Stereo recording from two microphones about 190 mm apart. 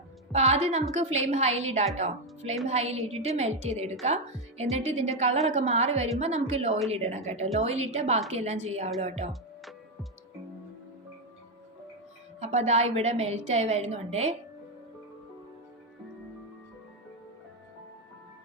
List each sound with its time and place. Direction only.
0.3 s a woman's voice: 35° right (ahead or behind)
9.3 s music: centre (ahead or behind)
12.4 s a woman's voice: 35° right (ahead or behind)